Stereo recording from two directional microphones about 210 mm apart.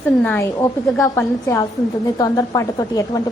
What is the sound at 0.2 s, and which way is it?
A woman's voice, 10° left (ahead or behind).